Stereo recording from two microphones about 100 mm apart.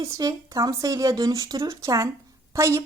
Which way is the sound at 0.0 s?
40° right (ahead or behind).